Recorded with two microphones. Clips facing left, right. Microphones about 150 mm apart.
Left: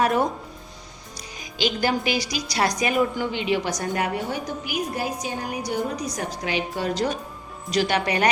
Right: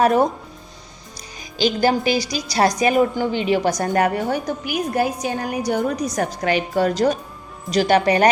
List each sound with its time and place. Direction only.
0.0 s a woman's voice: 40° right (ahead or behind)
1.5 s a woman's voice: 35° right (ahead or behind); by 6.9 s 50° right (ahead or behind)
7.7 s a woman's voice: 40° right (ahead or behind)